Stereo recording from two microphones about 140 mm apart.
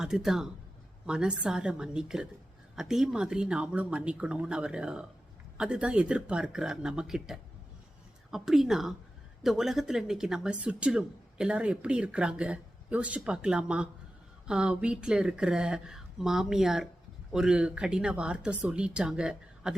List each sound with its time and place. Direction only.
0.0 s speech: 5° right (ahead or behind)